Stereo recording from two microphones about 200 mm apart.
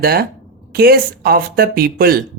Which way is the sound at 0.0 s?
50° right (ahead or behind).